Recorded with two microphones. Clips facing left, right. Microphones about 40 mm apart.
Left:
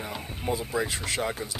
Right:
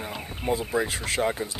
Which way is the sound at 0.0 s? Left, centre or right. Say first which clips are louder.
Right 2 dB; centre.